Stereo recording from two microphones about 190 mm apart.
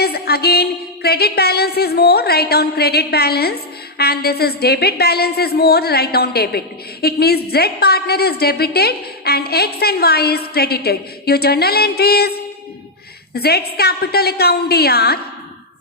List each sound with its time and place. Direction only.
0.0 s a woman's voice: 55° left (ahead or behind)